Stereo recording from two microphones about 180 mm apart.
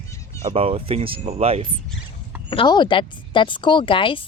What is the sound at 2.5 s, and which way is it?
Speech, 25° left (ahead or behind).